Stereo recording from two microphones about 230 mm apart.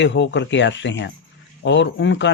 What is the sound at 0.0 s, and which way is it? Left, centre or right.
Speech, left.